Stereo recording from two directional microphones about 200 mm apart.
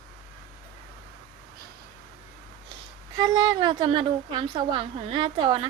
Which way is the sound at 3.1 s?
20° right (ahead or behind).